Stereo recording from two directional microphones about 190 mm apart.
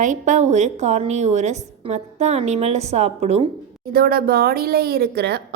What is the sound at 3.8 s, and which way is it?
A woman's voice, 50° right (ahead or behind).